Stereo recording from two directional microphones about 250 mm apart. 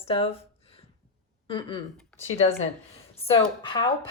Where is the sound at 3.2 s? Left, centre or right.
Centre.